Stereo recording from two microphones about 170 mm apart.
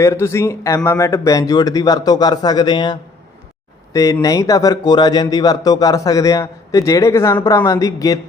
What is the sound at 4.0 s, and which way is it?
Speech, 20° left (ahead or behind).